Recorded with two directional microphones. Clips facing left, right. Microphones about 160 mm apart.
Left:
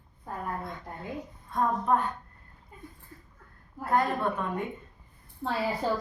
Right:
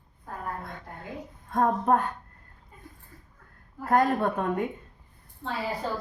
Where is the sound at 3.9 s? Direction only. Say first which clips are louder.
Right 4 dB; 45° right (ahead or behind).